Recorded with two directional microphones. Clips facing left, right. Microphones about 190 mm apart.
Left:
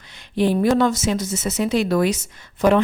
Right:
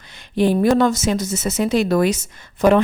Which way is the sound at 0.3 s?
45° right (ahead or behind).